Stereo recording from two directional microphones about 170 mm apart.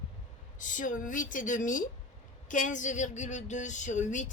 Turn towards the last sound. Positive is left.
turn(degrees=45)  # may be behind; listen again after turning